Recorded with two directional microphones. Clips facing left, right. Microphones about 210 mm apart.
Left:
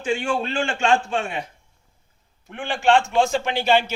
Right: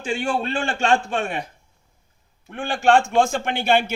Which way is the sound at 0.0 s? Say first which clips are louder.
Even; 35° right (ahead or behind).